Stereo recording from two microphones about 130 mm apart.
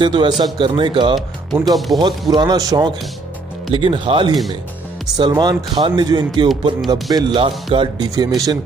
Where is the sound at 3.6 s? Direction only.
40° right (ahead or behind).